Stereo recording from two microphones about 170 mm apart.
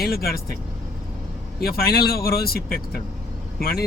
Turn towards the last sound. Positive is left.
turn(degrees=65)  # may be behind; listen again after turning